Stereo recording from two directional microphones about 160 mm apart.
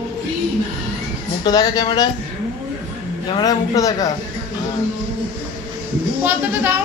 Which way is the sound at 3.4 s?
25° left (ahead or behind).